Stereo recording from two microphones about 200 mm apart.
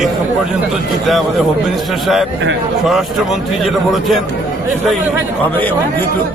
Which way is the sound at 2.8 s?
Centre (ahead or behind).